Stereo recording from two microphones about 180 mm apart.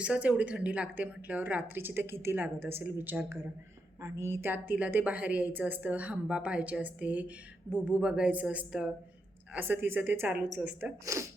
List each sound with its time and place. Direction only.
0.0 s a woman's voice: 5° right (ahead or behind)